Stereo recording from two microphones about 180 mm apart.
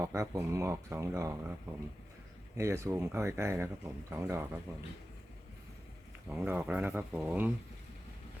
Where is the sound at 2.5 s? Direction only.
15° right (ahead or behind).